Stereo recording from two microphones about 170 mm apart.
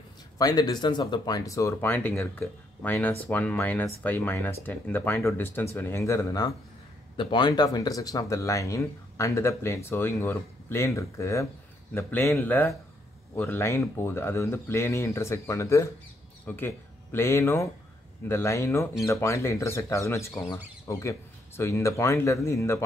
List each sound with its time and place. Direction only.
0.4 s speech: 20° left (ahead or behind)